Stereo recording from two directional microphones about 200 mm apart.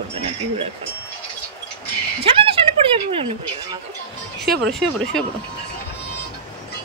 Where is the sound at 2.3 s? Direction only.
30° right (ahead or behind).